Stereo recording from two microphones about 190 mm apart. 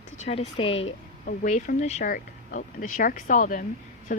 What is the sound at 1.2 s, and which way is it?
Speech, 45° left (ahead or behind).